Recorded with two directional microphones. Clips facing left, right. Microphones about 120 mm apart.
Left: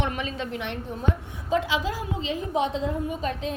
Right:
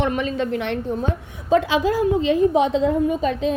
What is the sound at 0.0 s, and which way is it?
A woman's voice, 45° right (ahead or behind).